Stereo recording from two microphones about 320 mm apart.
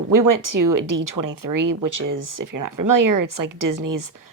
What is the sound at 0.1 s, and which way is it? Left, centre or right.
Speech, right.